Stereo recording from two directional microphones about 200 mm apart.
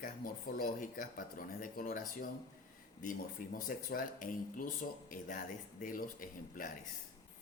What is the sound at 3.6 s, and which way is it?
Speech, 45° left (ahead or behind).